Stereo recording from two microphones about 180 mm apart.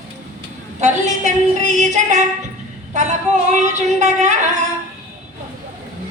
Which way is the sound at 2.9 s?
40° right (ahead or behind).